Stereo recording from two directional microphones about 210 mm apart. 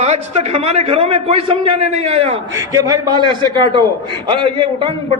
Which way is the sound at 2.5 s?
15° right (ahead or behind).